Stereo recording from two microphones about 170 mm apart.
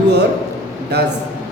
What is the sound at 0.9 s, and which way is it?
Speech, 75° right (ahead or behind).